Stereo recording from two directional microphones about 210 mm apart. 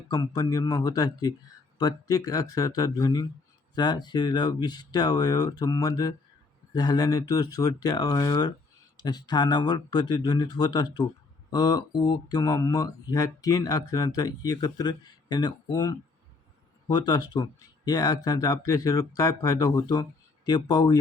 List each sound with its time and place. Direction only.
0.1 s speech: 15° left (ahead or behind)